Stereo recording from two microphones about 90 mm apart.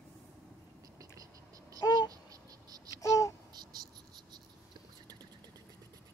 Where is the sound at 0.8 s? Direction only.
40° right (ahead or behind).